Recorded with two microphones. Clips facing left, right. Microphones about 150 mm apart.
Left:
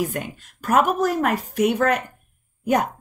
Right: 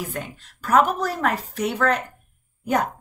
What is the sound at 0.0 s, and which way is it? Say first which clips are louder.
Speech: left 5 dB; 45° left (ahead or behind).